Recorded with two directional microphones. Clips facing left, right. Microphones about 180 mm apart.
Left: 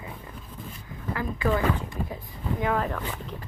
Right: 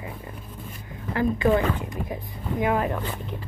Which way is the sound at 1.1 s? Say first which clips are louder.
Right 5 dB; 25° right (ahead or behind).